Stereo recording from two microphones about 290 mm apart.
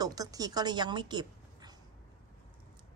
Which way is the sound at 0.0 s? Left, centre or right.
Centre.